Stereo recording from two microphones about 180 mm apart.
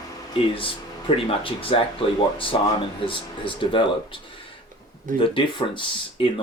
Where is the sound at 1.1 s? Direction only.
30° left (ahead or behind).